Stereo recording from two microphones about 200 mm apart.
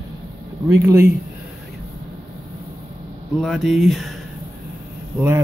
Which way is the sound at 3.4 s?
Centre (ahead or behind).